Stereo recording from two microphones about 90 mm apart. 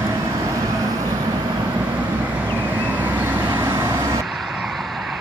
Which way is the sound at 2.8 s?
20° right (ahead or behind).